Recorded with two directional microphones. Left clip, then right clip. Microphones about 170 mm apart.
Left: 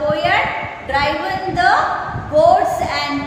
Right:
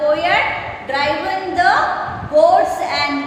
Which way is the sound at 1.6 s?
5° left (ahead or behind).